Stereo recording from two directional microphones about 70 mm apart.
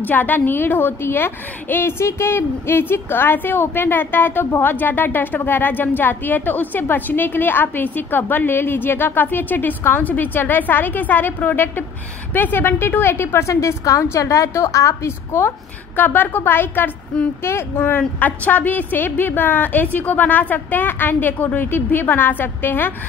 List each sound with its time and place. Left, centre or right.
0.0 s a woman's voice: left
16.0 s a woman's voice: left
17.7 s a woman's voice: left